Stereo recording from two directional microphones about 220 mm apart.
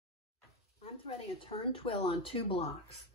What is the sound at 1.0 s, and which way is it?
Speech, 25° left (ahead or behind).